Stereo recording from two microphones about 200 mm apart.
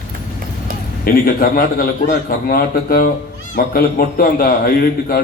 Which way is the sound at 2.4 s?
45° left (ahead or behind).